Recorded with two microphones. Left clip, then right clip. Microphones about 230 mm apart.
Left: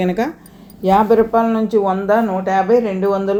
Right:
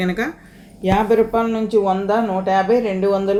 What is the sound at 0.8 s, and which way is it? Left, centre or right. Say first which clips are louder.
Speech: left 3 dB; centre.